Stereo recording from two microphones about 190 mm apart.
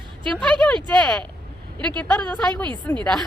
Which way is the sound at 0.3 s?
5° left (ahead or behind).